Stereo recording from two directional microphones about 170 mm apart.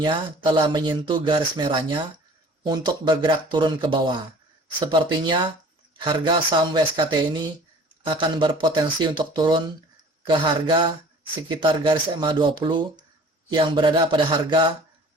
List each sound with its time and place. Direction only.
0.0 s speech: 30° right (ahead or behind)